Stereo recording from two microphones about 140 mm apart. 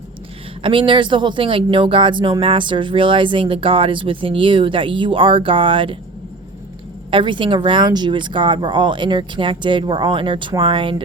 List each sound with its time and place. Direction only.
0.6 s speech: 35° right (ahead or behind)
7.1 s speech: 35° right (ahead or behind)